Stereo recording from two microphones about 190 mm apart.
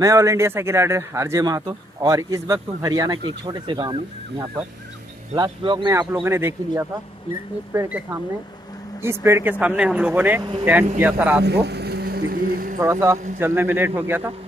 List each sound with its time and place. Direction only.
0.0 s speech: 15° right (ahead or behind)
5.9 s speech: 15° right (ahead or behind)
11.4 s a sound: 60° right (ahead or behind)
13.4 s speech: 10° right (ahead or behind)